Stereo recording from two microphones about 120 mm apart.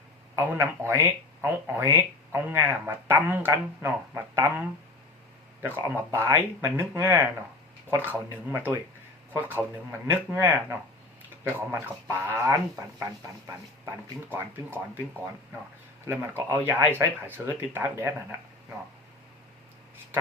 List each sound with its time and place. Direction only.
0.3 s speech: 20° right (ahead or behind)
5.6 s speech: 20° right (ahead or behind)
10.1 s speech: 20° right (ahead or behind)
16.5 s speech: 15° right (ahead or behind)